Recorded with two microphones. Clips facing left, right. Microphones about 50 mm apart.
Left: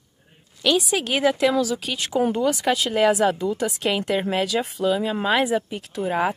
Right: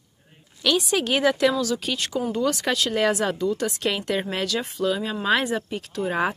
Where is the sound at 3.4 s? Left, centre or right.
Centre.